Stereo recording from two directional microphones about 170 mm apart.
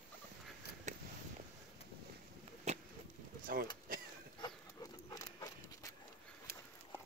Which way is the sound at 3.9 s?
55° right (ahead or behind).